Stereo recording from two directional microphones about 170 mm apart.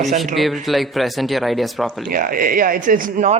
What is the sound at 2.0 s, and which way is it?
A man's voice, 55° right (ahead or behind).